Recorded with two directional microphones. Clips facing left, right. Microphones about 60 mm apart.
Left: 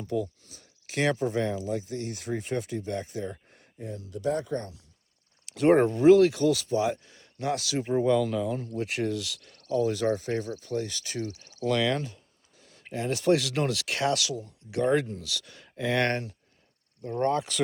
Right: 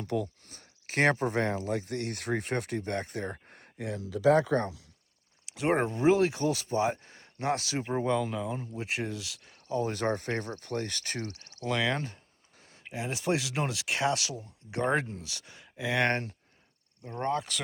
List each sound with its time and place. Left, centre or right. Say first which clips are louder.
0.0 s speech: left 2 dB; right
3.8 s speech: right 3 dB; right
5.5 s speech: left 7 dB; centre
9.8 s speech: left 5 dB; right
10.1 s speech: left 3 dB; right
11.6 s speech: left 4 dB; centre
11.9 s a sound: left 2 dB; right
12.9 s speech: left 6 dB; centre
15.6 s speech: left 2 dB; centre
16.0 s speech: even; right
17.0 s speech: left 5 dB; centre